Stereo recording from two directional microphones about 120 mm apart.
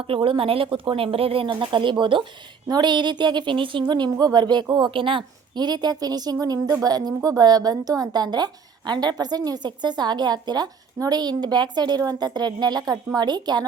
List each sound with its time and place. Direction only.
0.0 s a woman's voice: 50° right (ahead or behind)